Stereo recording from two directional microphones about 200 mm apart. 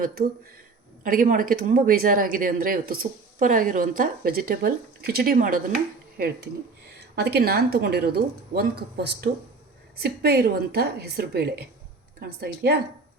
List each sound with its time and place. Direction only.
0.0 s speech: 50° right (ahead or behind)